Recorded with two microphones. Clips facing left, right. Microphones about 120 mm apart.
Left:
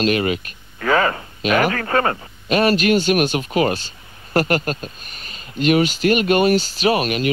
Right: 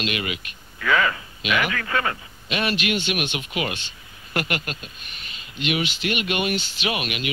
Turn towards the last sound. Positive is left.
turn(degrees=40)  # may be behind; listen again after turning